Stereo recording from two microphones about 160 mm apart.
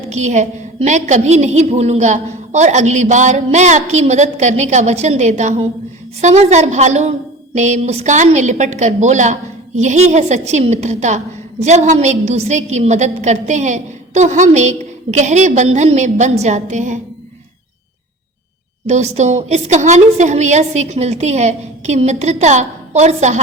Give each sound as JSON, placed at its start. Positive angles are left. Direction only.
{"t": 0.1, "sound": "a woman's voice", "side_deg": -45}
{"t": 18.9, "sound": "a woman's voice", "side_deg": -45}